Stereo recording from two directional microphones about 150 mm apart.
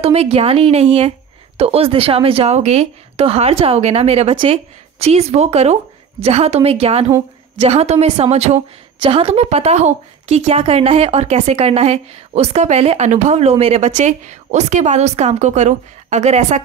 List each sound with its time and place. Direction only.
0.0 s a woman's voice: 40° right (ahead or behind)